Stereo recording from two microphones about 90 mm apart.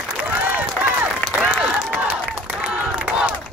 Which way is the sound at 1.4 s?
10° right (ahead or behind).